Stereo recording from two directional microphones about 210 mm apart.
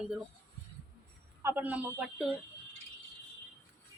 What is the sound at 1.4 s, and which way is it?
Speech, 10° right (ahead or behind).